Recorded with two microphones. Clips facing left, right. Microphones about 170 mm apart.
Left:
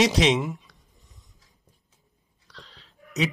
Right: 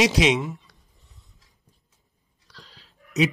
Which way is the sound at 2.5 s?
Centre (ahead or behind).